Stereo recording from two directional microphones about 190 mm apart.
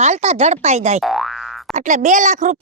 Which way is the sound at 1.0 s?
Centre (ahead or behind).